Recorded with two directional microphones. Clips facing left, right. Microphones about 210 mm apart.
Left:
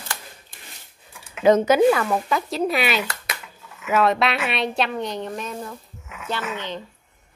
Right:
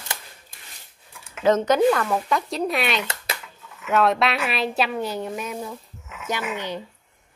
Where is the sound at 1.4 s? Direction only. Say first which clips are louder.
Left 3 dB; 10° left (ahead or behind).